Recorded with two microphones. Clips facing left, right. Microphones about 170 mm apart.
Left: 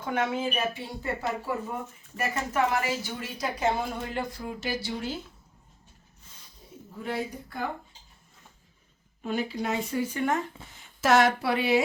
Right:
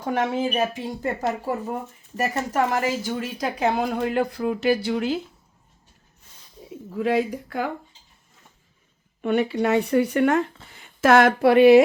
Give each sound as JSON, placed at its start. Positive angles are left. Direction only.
{"t": 0.0, "sound": "speech", "side_deg": -40}
{"t": 3.2, "sound": "speech", "side_deg": -60}
{"t": 6.9, "sound": "speech", "side_deg": -85}
{"t": 9.2, "sound": "speech", "side_deg": -70}